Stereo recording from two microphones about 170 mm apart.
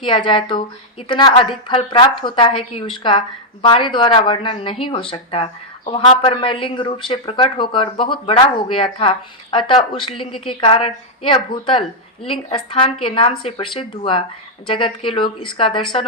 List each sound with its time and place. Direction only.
0.0 s a woman's voice: 30° left (ahead or behind)